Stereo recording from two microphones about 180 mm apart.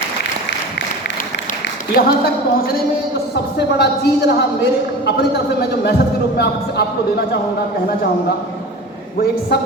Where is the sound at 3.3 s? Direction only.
70° left (ahead or behind).